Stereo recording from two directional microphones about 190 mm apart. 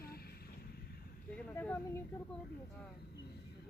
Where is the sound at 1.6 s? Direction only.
10° left (ahead or behind).